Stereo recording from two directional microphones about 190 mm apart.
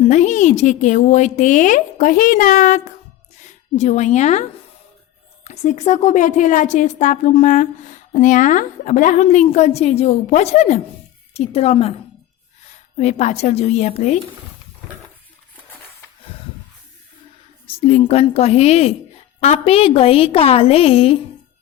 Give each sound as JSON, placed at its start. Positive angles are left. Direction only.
{"t": 0.0, "sound": "a woman's voice", "side_deg": 40}
{"t": 5.5, "sound": "a woman's voice", "side_deg": 40}
{"t": 13.0, "sound": "a woman's voice", "side_deg": 35}
{"t": 17.7, "sound": "a woman's voice", "side_deg": 30}